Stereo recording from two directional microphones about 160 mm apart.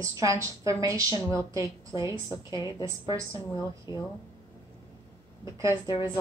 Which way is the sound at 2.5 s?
25° left (ahead or behind).